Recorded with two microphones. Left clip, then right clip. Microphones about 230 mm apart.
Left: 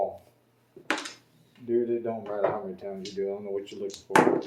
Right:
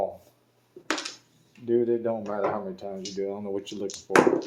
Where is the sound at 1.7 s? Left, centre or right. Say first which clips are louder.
Right 3 dB; right.